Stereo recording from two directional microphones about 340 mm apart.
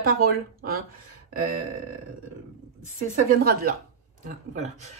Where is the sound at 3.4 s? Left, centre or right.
Right.